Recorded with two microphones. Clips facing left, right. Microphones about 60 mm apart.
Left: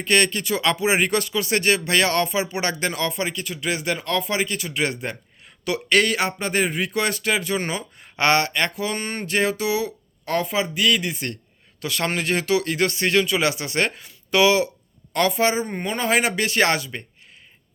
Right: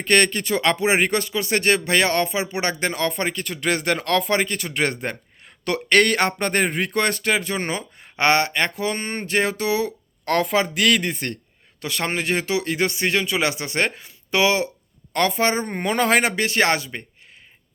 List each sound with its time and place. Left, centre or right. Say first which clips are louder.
0.0 s speech: right 2 dB; right
10.2 s a man's voice: right 3 dB; right
11.0 s speech: right 2 dB; right
11.8 s speech: even; right
16.2 s speech: even; right